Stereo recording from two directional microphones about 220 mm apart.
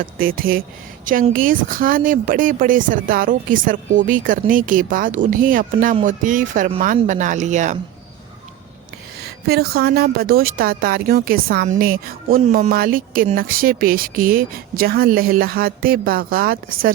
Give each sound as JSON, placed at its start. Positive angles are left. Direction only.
{"t": 0.0, "sound": "speech", "side_deg": -40}
{"t": 9.2, "sound": "a woman's voice", "side_deg": -45}